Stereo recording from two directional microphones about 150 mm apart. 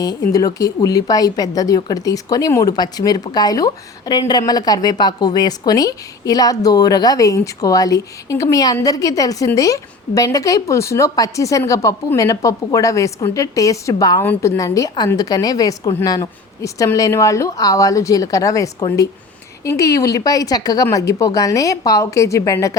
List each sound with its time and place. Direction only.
0.3 s a woman's voice: 25° left (ahead or behind)